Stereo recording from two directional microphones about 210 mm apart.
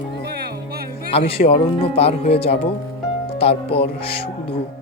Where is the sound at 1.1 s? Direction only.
30° left (ahead or behind).